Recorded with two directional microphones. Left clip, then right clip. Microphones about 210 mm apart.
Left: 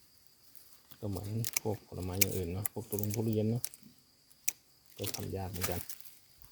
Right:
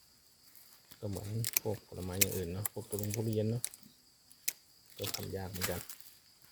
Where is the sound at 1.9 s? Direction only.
25° left (ahead or behind).